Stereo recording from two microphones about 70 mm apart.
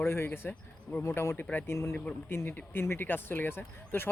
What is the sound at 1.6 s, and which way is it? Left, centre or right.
Speech, left.